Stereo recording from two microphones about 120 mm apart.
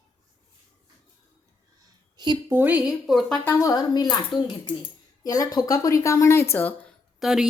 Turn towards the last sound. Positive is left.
turn(degrees=-5)  # may be behind; listen again after turning